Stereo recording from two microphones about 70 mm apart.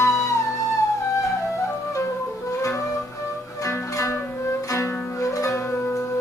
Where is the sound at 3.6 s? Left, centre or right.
Left.